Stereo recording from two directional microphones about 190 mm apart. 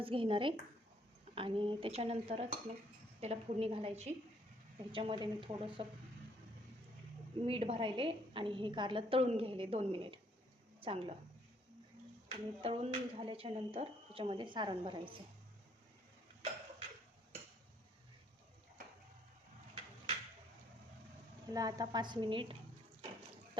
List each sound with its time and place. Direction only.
0.0 s a woman's voice: 30° right (ahead or behind)
7.4 s speech: 30° right (ahead or behind)
12.3 s speech: 30° right (ahead or behind)
21.5 s speech: 20° right (ahead or behind)